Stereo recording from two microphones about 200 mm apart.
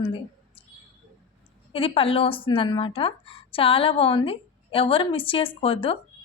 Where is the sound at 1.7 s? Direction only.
25° left (ahead or behind).